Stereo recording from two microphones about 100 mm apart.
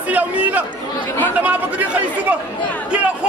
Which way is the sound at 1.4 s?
15° right (ahead or behind).